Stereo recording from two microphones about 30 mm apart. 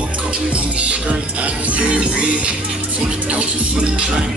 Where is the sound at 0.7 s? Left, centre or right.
Right.